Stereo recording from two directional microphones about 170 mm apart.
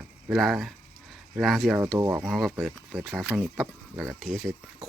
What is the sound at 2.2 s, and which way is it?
Speech, centre (ahead or behind).